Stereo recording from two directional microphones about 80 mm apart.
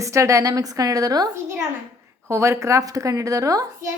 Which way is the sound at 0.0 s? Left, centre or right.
Right.